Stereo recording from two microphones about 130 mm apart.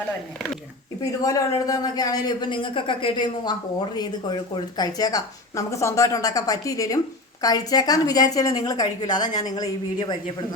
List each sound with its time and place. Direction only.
1.2 s speech: 25° left (ahead or behind)